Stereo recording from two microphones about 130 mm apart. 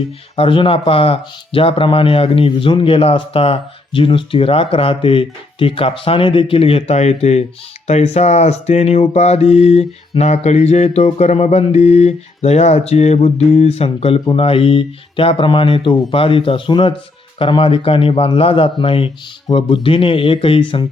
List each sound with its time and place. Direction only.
0.3 s speech: 45° left (ahead or behind)
7.9 s mantra: 55° left (ahead or behind); by 16.9 s 40° left (ahead or behind)
17.3 s speech: 45° left (ahead or behind)